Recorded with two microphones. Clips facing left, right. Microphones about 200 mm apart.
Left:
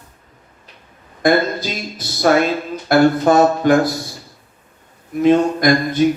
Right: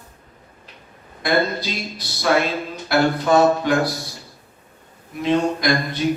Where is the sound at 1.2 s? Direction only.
45° left (ahead or behind).